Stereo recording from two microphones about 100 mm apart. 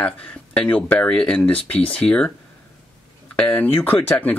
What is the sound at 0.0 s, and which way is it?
Speech, 15° left (ahead or behind).